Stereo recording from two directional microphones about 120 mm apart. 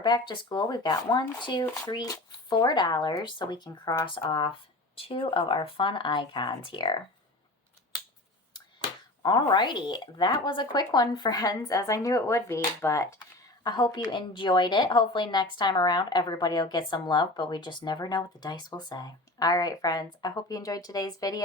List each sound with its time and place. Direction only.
0.0 s a woman's voice: 35° left (ahead or behind)
9.2 s a woman's voice: 40° left (ahead or behind)
13.7 s a woman's voice: 35° left (ahead or behind)